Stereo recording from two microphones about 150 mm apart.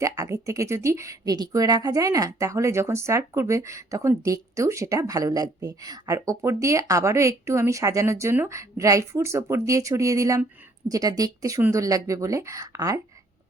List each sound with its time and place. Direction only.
0.0 s speech: 20° right (ahead or behind)